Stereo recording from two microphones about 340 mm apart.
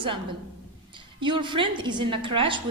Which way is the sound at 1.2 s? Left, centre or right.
Centre.